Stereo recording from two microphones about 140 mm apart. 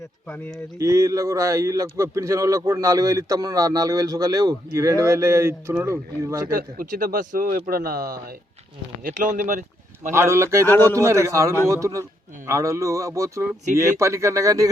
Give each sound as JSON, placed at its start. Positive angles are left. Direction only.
{"t": 0.3, "sound": "speech", "side_deg": 10}
{"t": 0.8, "sound": "speech", "side_deg": -20}
{"t": 6.5, "sound": "speech", "side_deg": -85}
{"t": 9.0, "sound": "speech", "side_deg": -70}
{"t": 10.1, "sound": "speech", "side_deg": -20}
{"t": 10.7, "sound": "speech", "side_deg": 15}
{"t": 10.9, "sound": "speech", "side_deg": -20}